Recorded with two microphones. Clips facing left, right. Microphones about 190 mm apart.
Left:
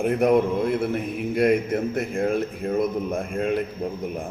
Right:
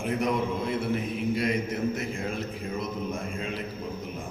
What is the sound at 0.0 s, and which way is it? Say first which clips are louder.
A man's voice: left 8 dB; 60° left (ahead or behind).